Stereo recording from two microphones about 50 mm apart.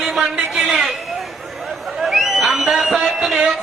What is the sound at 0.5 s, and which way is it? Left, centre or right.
Speech, centre.